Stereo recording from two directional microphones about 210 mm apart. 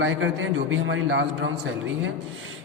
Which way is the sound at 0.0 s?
70° right (ahead or behind).